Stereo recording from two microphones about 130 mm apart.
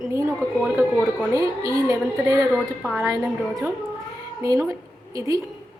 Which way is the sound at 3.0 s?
25° right (ahead or behind).